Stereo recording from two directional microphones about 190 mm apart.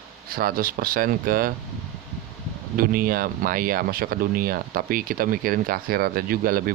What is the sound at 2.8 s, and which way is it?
Speech, 50° right (ahead or behind).